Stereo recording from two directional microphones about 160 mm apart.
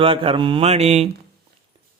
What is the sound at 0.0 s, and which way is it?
Mantra, 35° right (ahead or behind).